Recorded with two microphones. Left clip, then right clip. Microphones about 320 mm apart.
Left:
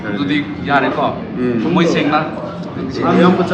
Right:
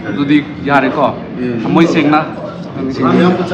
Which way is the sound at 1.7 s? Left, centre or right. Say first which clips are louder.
Right 5 dB; centre.